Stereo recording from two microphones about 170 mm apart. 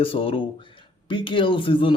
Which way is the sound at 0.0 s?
30° left (ahead or behind).